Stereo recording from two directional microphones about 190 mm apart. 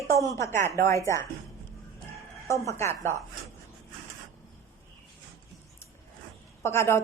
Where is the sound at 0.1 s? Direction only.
15° left (ahead or behind).